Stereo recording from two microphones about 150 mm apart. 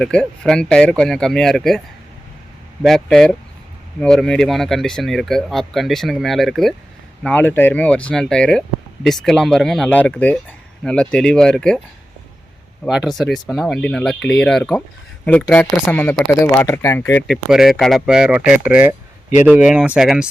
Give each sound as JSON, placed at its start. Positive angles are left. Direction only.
{"t": 0.0, "sound": "speech", "side_deg": 5}
{"t": 2.8, "sound": "speech", "side_deg": 5}
{"t": 12.8, "sound": "speech", "side_deg": 0}
{"t": 17.2, "sound": "speech", "side_deg": 0}